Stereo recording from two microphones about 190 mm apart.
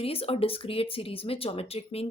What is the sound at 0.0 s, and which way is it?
Speech, 30° left (ahead or behind).